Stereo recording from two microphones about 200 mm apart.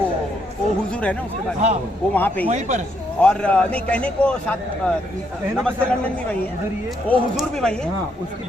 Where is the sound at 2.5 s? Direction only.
35° right (ahead or behind).